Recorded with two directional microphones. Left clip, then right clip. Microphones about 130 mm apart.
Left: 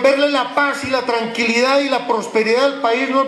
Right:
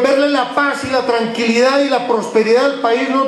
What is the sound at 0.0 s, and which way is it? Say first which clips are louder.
A man's voice: right 1 dB; 20° left (ahead or behind).